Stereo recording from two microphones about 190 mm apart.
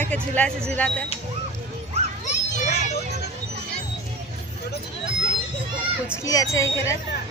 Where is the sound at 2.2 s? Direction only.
40° left (ahead or behind).